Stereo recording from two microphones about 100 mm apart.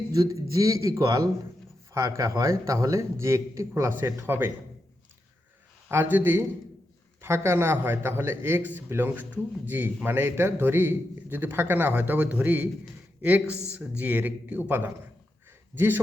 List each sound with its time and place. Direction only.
0.1 s a man's voice: 35° right (ahead or behind)
5.9 s a man's voice: 20° right (ahead or behind)